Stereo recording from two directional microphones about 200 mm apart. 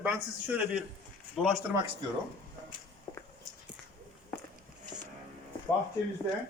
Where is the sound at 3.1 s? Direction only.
20° left (ahead or behind).